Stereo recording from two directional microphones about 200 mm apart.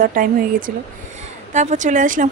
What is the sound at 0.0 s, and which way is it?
A woman's voice, 45° right (ahead or behind).